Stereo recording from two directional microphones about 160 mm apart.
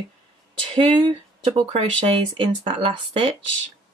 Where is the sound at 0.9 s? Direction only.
35° right (ahead or behind).